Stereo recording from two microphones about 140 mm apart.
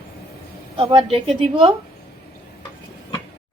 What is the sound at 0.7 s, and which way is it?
Speech, 35° right (ahead or behind).